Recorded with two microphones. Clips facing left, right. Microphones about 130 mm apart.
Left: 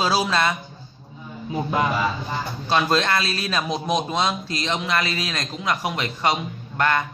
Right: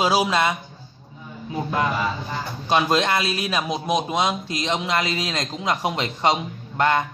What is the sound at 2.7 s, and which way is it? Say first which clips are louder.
Speech: right 1 dB; 15° right (ahead or behind).